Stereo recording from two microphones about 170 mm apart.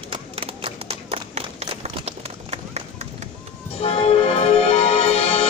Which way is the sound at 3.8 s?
35° left (ahead or behind).